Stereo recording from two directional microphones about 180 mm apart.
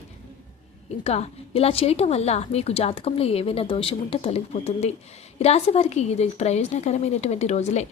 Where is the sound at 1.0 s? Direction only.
35° left (ahead or behind).